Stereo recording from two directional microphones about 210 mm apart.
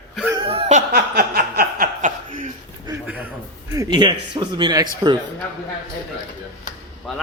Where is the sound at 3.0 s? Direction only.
5° right (ahead or behind).